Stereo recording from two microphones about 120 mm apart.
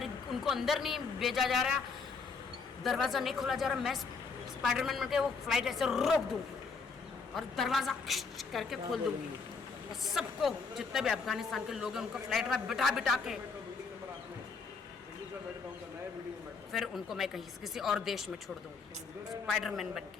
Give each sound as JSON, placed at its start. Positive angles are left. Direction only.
{"t": 0.0, "sound": "a man's voice", "side_deg": 0}
{"t": 2.8, "sound": "a woman's voice", "side_deg": 0}
{"t": 7.3, "sound": "a woman's voice", "side_deg": 0}
{"t": 16.7, "sound": "a woman's voice", "side_deg": 0}